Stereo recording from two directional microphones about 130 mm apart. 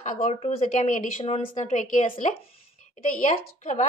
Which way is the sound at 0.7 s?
70° left (ahead or behind).